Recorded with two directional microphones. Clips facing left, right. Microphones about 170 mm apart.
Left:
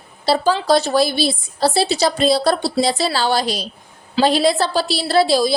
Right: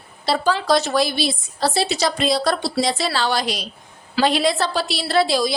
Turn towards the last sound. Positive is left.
turn(degrees=30)  # may be behind; listen again after turning